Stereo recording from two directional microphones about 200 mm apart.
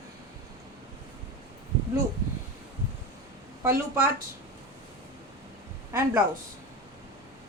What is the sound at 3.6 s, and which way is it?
Speech, 10° right (ahead or behind).